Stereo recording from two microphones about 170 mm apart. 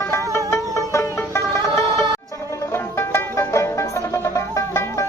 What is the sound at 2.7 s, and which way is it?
Music, 15° left (ahead or behind).